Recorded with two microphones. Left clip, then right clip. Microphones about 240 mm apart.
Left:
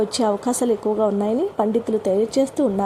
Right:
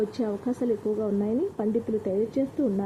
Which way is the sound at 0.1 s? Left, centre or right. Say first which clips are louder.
Left 9 dB; centre.